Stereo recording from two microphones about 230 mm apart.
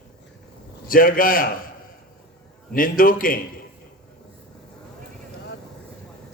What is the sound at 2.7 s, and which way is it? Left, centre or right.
Speech, left.